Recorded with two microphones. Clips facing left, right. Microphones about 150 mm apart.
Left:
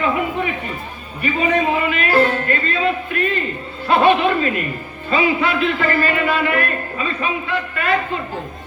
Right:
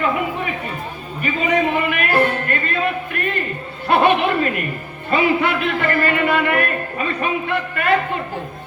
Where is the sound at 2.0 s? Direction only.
55° right (ahead or behind).